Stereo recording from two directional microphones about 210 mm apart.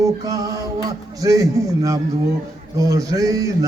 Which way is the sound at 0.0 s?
15° right (ahead or behind).